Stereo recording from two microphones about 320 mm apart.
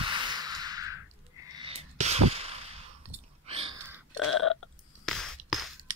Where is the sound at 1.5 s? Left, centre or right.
Centre.